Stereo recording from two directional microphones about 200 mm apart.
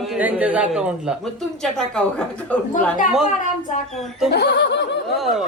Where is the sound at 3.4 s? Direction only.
40° left (ahead or behind).